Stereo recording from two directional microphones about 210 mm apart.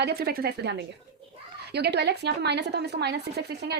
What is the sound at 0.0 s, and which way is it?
A woman's voice, 50° right (ahead or behind).